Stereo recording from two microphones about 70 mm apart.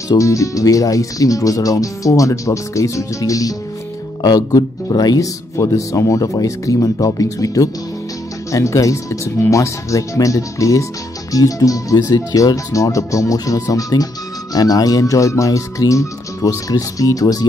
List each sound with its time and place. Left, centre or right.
0.2 s speech: left